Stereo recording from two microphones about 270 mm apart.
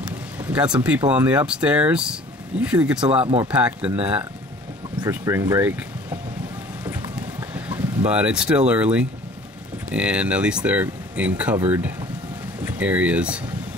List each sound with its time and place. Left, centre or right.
0.4 s speech: centre
3.1 s speech: centre
3.4 s speech: centre
6.8 s clip-clop: centre
8.1 s speech: centre